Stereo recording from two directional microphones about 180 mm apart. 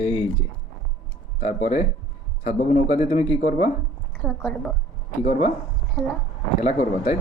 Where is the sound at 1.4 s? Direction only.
40° left (ahead or behind).